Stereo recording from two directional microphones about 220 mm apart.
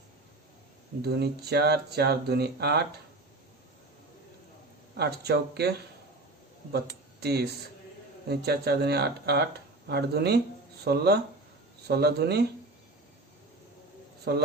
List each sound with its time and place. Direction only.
1.0 s speech: 45° right (ahead or behind)
4.9 s speech: 50° right (ahead or behind)
14.3 s speech: 45° right (ahead or behind)